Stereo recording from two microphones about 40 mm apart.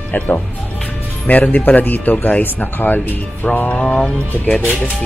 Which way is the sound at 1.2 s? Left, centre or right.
Left.